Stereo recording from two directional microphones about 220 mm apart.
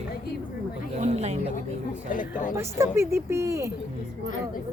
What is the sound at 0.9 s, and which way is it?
Speech, 30° right (ahead or behind).